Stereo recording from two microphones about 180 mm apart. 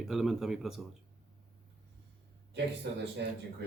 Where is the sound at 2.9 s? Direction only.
70° right (ahead or behind).